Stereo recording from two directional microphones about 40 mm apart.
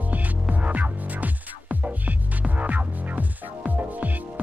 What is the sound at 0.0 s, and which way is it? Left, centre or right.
Music, right.